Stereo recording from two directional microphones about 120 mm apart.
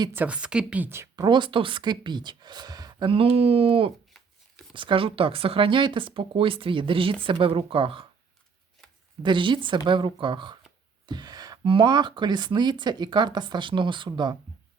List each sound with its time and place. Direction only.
0.1 s a woman's voice: 15° right (ahead or behind)
1.1 s speech: 40° right (ahead or behind)
3.1 s speech: 55° right (ahead or behind)
4.1 s shuffling cards: centre (ahead or behind)
4.7 s speech: 45° right (ahead or behind)
9.2 s speech: 45° right (ahead or behind)